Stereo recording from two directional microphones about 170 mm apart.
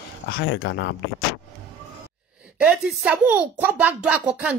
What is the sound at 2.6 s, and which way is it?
Speech, 5° right (ahead or behind).